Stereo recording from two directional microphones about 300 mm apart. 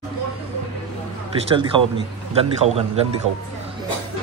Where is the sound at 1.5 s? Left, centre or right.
Centre.